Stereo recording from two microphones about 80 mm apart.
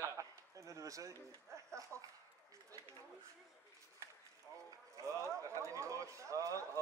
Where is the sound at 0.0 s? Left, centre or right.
Right.